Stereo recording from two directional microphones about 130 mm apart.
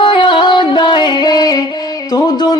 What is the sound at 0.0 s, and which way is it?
Music, 40° left (ahead or behind).